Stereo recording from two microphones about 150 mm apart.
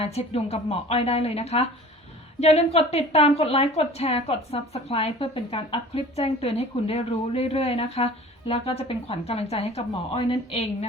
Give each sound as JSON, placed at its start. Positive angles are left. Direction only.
{"t": 0.0, "sound": "a woman's voice", "side_deg": 45}